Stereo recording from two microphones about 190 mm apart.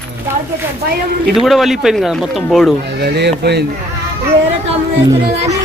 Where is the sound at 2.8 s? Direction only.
60° right (ahead or behind).